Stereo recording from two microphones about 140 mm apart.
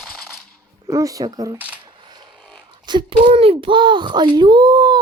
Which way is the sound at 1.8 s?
30° right (ahead or behind).